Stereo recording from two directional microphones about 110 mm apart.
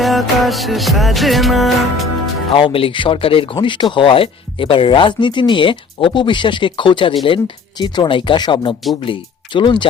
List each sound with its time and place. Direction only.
0.0 s music: centre (ahead or behind)
2.5 s speech: 55° left (ahead or behind)